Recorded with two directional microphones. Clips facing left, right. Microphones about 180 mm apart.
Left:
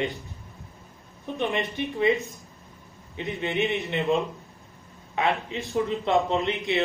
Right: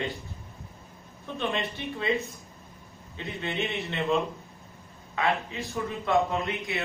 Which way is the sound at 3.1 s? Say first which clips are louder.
Left 5 dB; 15° left (ahead or behind).